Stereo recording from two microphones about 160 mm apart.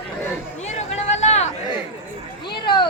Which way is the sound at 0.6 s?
45° left (ahead or behind).